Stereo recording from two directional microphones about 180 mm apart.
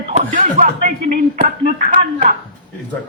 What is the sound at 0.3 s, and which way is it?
Speech, 45° right (ahead or behind).